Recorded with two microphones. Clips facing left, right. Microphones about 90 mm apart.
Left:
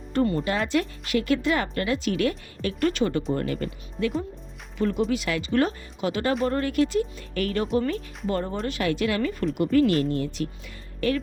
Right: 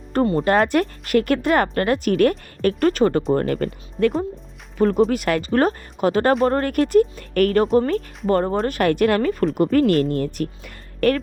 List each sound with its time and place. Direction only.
0.4 s a woman's voice: 50° right (ahead or behind)